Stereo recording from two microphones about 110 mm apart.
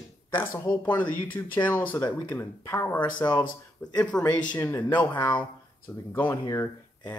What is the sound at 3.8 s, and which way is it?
Speech, 15° left (ahead or behind).